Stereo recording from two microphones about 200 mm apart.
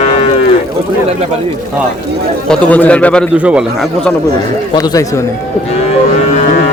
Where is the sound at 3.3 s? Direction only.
5° right (ahead or behind).